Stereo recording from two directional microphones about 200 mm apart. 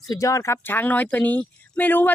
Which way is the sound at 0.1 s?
15° left (ahead or behind).